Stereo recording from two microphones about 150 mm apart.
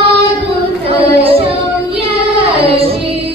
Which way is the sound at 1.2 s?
40° right (ahead or behind).